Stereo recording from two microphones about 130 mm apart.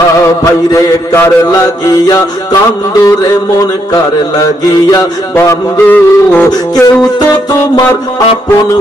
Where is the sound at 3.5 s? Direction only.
25° left (ahead or behind).